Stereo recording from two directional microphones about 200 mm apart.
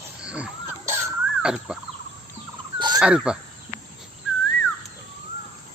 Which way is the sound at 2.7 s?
20° right (ahead or behind).